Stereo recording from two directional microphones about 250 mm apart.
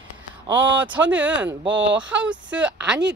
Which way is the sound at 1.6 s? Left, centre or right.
Right.